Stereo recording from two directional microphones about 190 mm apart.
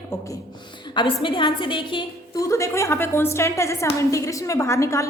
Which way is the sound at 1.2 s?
25° left (ahead or behind).